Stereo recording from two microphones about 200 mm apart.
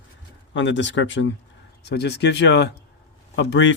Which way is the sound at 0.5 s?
65° left (ahead or behind).